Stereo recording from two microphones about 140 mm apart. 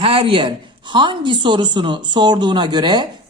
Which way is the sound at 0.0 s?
40° right (ahead or behind).